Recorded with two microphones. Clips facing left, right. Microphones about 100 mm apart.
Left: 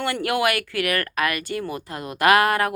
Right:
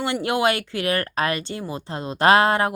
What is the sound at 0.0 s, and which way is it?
Speech, 20° right (ahead or behind).